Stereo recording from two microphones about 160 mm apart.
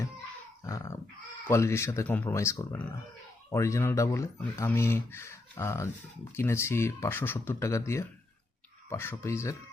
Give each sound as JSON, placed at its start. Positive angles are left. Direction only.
{"t": 0.6, "sound": "dog", "side_deg": 20}
{"t": 1.5, "sound": "speech", "side_deg": 15}